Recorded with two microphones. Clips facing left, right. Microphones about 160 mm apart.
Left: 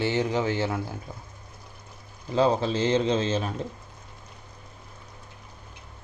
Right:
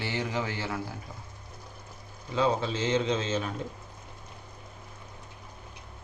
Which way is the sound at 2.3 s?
35° left (ahead or behind).